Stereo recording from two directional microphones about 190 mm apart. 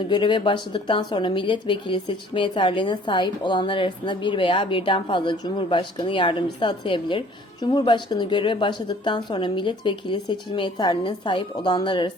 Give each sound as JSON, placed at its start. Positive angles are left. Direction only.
{"t": 0.0, "sound": "a woman's voice", "side_deg": 25}